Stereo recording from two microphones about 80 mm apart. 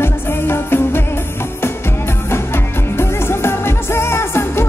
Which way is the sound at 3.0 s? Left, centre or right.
Left.